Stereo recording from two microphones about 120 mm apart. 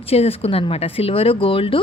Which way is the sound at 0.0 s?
55° left (ahead or behind).